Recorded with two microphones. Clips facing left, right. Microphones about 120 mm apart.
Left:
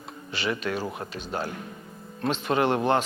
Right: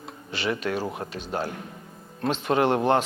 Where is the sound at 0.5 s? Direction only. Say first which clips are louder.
Right 3 dB; 40° right (ahead or behind).